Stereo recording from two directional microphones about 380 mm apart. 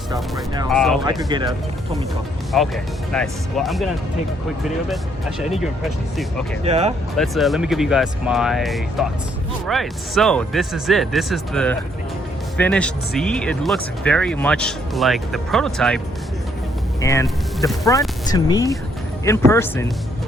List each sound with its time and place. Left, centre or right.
0.1 s speech: centre
1.0 s speech: centre
2.5 s speech: centre
5.4 s speech: centre
6.7 s speech: centre
7.2 s speech: centre
17.0 s speech: centre